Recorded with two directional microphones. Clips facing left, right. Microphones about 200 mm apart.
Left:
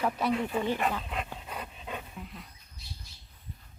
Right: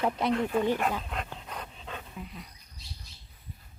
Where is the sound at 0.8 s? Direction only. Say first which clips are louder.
Right 1 dB; 5° right (ahead or behind).